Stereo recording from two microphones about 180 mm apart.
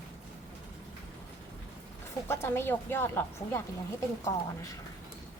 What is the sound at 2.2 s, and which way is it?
A woman's voice, 15° left (ahead or behind).